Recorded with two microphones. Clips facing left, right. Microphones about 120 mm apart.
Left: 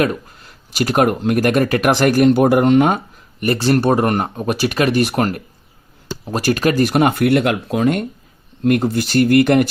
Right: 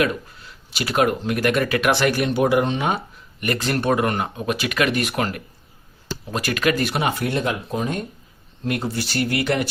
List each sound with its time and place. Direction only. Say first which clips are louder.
0.0 s speech: left 3 dB; 45° left (ahead or behind)
3.4 s speech: left 7 dB; 35° left (ahead or behind); by 8.0 s 80° left
8.6 s speech: left 9 dB; 50° left (ahead or behind)